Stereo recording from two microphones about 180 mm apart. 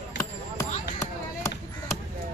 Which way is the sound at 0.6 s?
20° left (ahead or behind).